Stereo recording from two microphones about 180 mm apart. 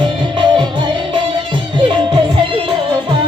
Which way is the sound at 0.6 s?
25° right (ahead or behind).